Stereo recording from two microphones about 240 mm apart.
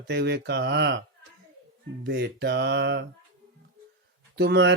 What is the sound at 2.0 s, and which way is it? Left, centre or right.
Speech, right.